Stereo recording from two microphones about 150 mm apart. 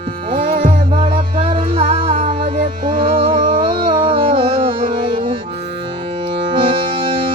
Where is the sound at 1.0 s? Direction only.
35° right (ahead or behind).